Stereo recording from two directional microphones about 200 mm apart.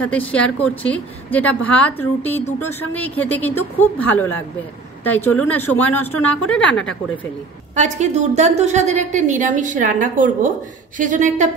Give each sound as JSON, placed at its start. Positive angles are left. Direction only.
{"t": 0.0, "sound": "a woman's voice", "side_deg": 5}
{"t": 7.7, "sound": "a woman's voice", "side_deg": -35}